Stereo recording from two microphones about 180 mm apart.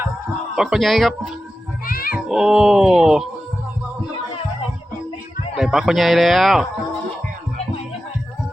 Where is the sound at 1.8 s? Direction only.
55° left (ahead or behind).